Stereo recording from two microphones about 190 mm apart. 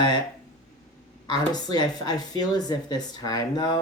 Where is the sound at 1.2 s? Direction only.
20° left (ahead or behind).